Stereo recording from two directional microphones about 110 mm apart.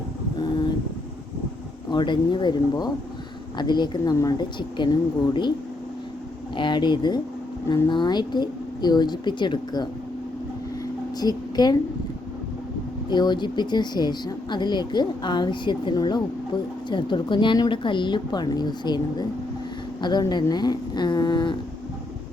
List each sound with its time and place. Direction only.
1.9 s speech: 45° left (ahead or behind)
6.6 s speech: 45° left (ahead or behind)
11.2 s speech: 40° left (ahead or behind)
13.1 s speech: 40° left (ahead or behind)